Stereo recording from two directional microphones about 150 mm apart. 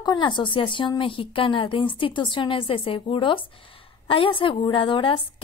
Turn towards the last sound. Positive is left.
turn(degrees=35)  # may be behind; listen again after turning